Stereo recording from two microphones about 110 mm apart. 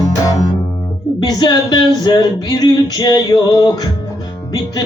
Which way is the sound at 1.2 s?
40° left (ahead or behind).